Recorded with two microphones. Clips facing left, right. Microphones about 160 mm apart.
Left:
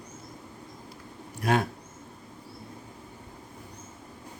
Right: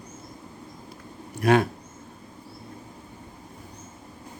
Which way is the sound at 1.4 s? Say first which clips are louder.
Right 6 dB; 75° right (ahead or behind).